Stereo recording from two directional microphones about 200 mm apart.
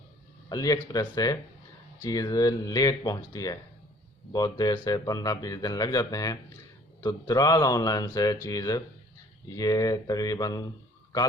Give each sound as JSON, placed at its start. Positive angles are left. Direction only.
{"t": 0.4, "sound": "speech", "side_deg": 20}